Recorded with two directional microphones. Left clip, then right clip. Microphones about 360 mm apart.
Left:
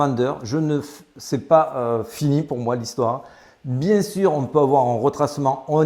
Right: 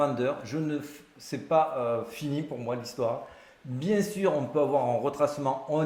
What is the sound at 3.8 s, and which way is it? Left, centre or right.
Speech, left.